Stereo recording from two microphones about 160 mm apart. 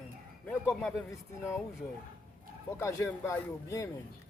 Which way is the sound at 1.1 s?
15° left (ahead or behind).